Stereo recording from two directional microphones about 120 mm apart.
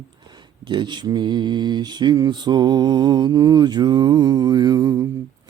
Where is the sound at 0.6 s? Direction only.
40° right (ahead or behind).